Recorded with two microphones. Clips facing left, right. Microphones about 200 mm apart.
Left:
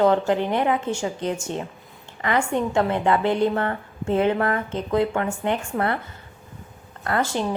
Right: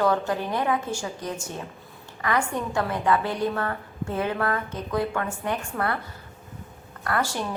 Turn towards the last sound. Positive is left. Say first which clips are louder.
# left 3 dB
turn(degrees=20)  # may be behind; listen again after turning